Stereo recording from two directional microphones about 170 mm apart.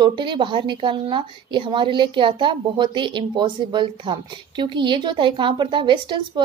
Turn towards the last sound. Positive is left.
turn(degrees=-25)  # may be behind; listen again after turning